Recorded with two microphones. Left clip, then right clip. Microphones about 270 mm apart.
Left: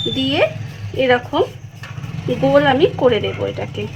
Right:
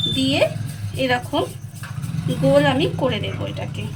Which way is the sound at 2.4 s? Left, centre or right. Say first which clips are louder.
Left 4 dB; centre.